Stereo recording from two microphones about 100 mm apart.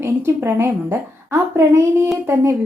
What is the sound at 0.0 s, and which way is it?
Speech, 25° right (ahead or behind).